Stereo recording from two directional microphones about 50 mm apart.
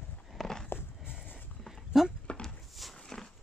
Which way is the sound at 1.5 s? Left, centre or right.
Centre.